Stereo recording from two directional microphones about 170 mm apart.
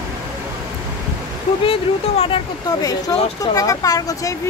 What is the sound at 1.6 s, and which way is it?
Speech, 30° left (ahead or behind).